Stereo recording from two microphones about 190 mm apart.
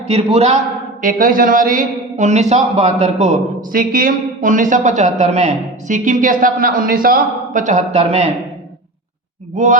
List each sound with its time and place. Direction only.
0.1 s a man's voice: 30° right (ahead or behind)
1.0 s a man's voice: 45° right (ahead or behind)